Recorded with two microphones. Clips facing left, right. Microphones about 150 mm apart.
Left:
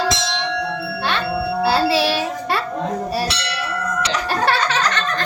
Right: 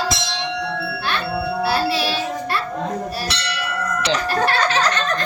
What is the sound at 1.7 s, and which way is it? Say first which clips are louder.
Child singing: left 5 dB; 90° left.